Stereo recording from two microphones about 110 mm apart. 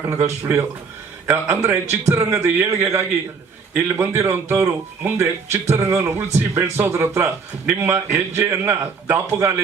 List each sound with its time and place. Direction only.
0.0 s a man's voice: 25° right (ahead or behind)